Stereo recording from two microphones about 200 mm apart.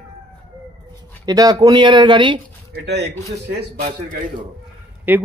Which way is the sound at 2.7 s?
55° right (ahead or behind).